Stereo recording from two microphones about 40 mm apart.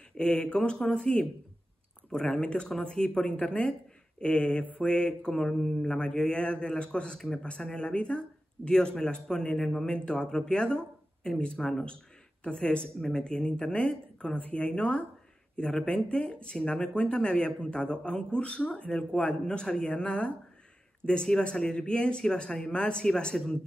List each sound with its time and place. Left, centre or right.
0.2 s speech: left
5.3 s speech: centre
5.9 s speech: left